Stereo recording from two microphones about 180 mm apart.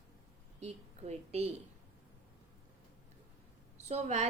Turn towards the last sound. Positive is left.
turn(degrees=-40)  # may be behind; listen again after turning